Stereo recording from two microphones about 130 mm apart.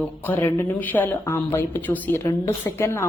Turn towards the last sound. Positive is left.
turn(degrees=20)  # may be behind; listen again after turning